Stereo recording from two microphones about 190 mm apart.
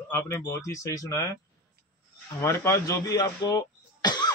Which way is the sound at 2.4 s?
15° left (ahead or behind).